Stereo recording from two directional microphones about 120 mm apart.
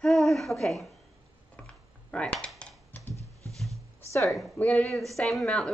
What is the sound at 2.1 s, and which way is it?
Typing, 5° left (ahead or behind).